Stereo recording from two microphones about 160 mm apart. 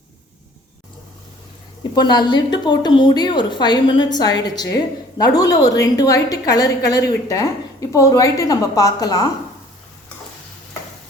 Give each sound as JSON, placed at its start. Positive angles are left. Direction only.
{"t": 1.8, "sound": "a woman's voice", "side_deg": 25}